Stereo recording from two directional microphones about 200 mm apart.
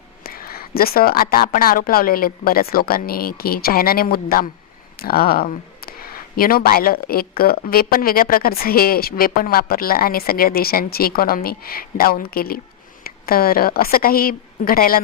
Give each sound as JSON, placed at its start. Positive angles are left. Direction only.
{"t": 0.2, "sound": "speech", "side_deg": 50}